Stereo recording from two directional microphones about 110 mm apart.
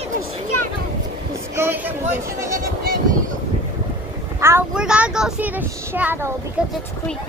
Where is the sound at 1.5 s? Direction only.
20° right (ahead or behind).